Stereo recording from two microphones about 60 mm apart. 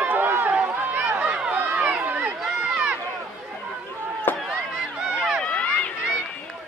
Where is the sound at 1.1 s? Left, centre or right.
Right.